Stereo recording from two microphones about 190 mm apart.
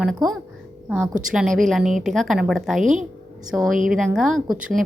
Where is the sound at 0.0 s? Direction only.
Centre (ahead or behind).